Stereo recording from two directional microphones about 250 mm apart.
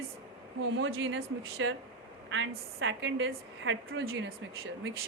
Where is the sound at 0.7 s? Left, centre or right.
Right.